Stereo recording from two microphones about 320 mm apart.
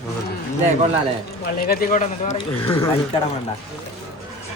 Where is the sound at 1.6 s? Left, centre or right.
Left.